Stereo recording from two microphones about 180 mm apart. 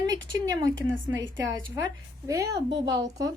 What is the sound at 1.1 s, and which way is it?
Speech, 90° right.